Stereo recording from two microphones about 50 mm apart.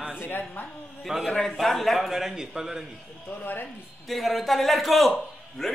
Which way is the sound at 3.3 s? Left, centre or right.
Left.